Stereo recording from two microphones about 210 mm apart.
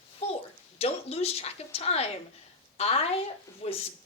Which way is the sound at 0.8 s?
30° left (ahead or behind).